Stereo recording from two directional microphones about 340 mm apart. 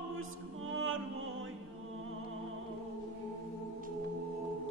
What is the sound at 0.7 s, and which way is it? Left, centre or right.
Music, right.